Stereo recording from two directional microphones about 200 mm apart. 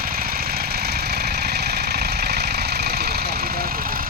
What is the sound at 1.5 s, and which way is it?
Engine, 55° right (ahead or behind).